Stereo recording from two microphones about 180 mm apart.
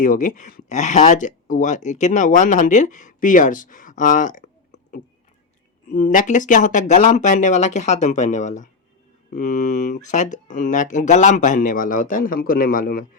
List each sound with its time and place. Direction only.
0.0 s speech: 45° left (ahead or behind)
5.9 s speech: 45° left (ahead or behind)